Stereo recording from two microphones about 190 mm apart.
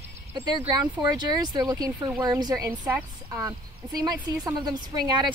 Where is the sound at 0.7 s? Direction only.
20° right (ahead or behind).